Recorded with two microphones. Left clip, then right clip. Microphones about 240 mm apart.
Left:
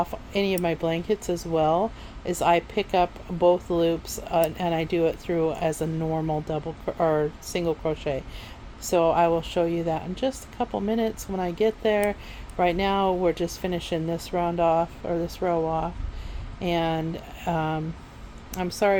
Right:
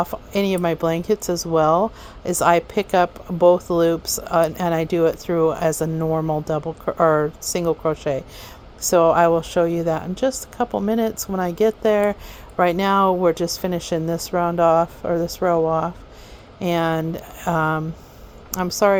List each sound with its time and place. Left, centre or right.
0.0 s a woman's voice: right